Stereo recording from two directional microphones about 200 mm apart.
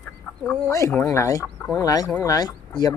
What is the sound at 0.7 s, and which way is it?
Speech, 15° left (ahead or behind).